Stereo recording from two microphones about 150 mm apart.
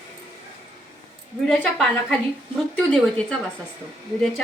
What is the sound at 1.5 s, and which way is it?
Speech, 10° left (ahead or behind).